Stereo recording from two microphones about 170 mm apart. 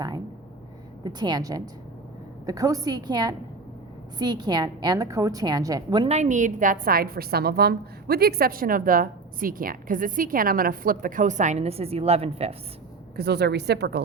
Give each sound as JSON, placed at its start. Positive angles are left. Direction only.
{"t": 1.0, "sound": "a woman's voice", "side_deg": -25}
{"t": 6.1, "sound": "a woman's voice", "side_deg": -45}
{"t": 13.1, "sound": "a woman's voice", "side_deg": -75}